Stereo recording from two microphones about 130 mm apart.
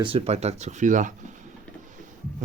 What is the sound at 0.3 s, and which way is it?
Speech, 55° right (ahead or behind).